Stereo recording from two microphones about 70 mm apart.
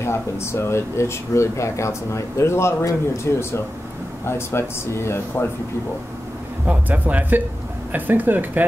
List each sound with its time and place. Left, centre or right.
0.0 s speech: left
6.6 s speech: right